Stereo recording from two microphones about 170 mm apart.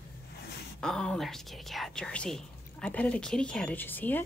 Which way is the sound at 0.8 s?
5° left (ahead or behind).